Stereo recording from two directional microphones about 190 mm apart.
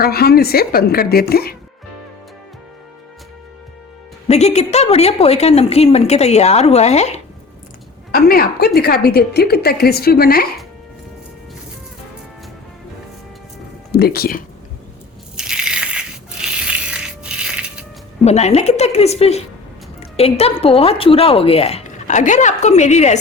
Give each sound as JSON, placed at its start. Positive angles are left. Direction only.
{"t": 0.0, "sound": "a woman's voice", "side_deg": 55}
{"t": 4.3, "sound": "a woman's voice", "side_deg": 35}
{"t": 8.1, "sound": "a woman's voice", "side_deg": 50}
{"t": 13.9, "sound": "a woman's voice", "side_deg": 55}
{"t": 15.4, "sound": "crushing", "side_deg": -5}
{"t": 18.3, "sound": "a woman's voice", "side_deg": 35}